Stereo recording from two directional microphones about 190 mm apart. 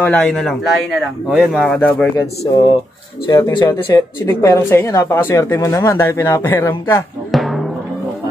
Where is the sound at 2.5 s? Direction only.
25° left (ahead or behind).